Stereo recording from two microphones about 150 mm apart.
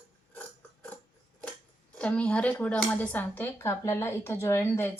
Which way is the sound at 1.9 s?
10° left (ahead or behind).